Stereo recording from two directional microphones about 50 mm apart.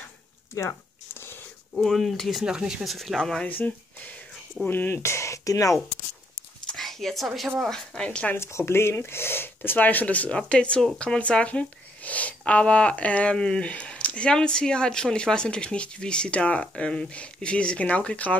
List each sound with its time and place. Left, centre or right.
0.6 s speech: left
1.1 s whispering: left
1.8 s speech: centre
2.4 s speech: centre
2.8 s speech: centre
3.4 s speech: left
4.9 s speech: left
6.7 s a sound: centre
7.7 s speech: centre
8.4 s speech: left
9.6 s speech: left